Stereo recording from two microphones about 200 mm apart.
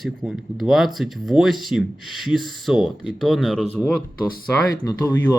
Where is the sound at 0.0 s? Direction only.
Centre (ahead or behind).